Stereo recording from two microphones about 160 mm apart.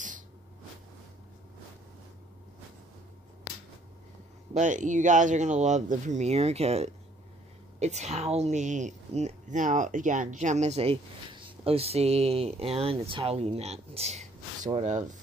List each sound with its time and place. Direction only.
4.6 s speech: 50° right (ahead or behind)